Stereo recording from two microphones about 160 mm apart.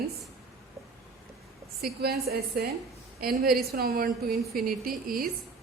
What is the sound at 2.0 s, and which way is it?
A woman's voice, 75° right (ahead or behind).